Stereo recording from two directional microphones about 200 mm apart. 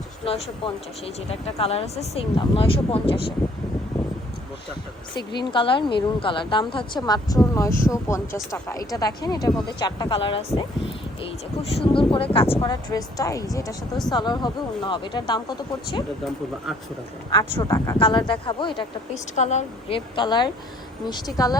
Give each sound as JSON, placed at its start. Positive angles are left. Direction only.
{"t": 0.3, "sound": "speech", "side_deg": 30}
{"t": 5.4, "sound": "speech", "side_deg": 25}
{"t": 17.6, "sound": "speech", "side_deg": 20}
{"t": 19.1, "sound": "speech", "side_deg": 35}